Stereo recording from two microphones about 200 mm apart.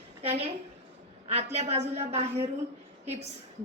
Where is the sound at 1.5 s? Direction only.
30° right (ahead or behind).